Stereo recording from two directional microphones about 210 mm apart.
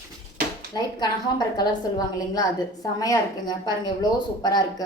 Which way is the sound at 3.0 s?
20° left (ahead or behind).